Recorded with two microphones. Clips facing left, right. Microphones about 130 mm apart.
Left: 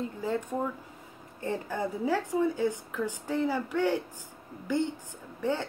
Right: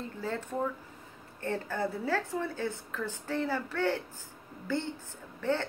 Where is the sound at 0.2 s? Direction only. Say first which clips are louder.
Left 1 dB; 15° left (ahead or behind).